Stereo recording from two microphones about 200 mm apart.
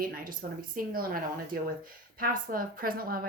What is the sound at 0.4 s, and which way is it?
A woman's voice, 45° right (ahead or behind).